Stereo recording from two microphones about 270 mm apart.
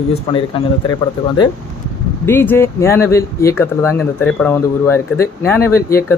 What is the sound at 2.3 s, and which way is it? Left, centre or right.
Speech, centre.